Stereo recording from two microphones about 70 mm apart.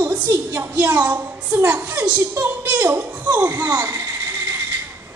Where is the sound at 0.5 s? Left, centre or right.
Right.